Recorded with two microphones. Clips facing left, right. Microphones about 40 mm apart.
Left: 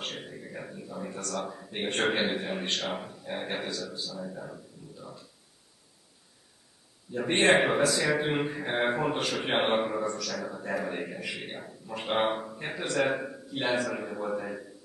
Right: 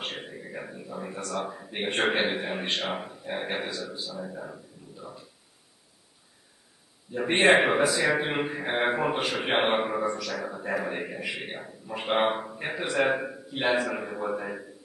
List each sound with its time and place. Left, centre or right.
0.0 s a man's voice: centre
7.1 s a man's voice: centre